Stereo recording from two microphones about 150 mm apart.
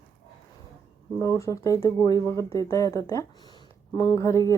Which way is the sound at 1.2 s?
20° left (ahead or behind).